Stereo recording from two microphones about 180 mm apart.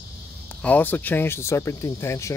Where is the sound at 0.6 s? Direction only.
10° left (ahead or behind).